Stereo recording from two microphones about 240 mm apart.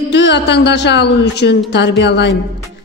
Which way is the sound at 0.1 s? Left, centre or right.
Left.